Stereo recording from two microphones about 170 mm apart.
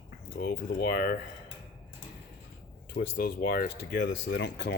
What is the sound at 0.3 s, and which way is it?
Speech, 60° left (ahead or behind).